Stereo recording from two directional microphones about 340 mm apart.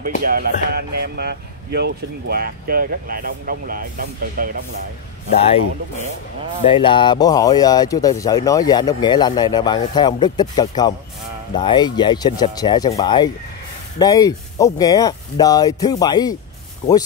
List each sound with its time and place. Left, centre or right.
0.2 s speech: right
5.3 s speech: centre